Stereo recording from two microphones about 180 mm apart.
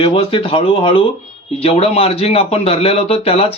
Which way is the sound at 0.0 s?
30° left (ahead or behind).